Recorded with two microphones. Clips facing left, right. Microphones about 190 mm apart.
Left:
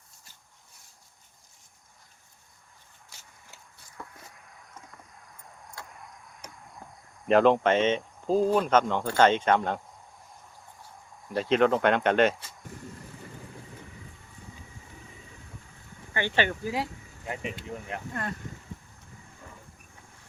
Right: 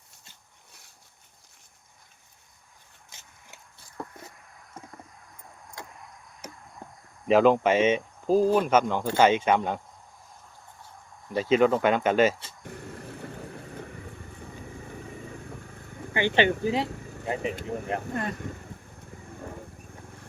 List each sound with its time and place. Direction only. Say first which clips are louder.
3.1 s a sound: right 2 dB; 20° right (ahead or behind)
6.4 s caw: right 5 dB; 5° right (ahead or behind)
7.3 s speech: right 1 dB; 5° right (ahead or behind)
11.3 s speech: right 2 dB; centre (ahead or behind)
12.9 s vehicle: right 5 dB; 70° right (ahead or behind)
16.1 s speech: right 5 dB; 20° right (ahead or behind)
17.6 s speech: right 6 dB; 40° right (ahead or behind)
18.1 s speech: right 4 dB; 20° right (ahead or behind)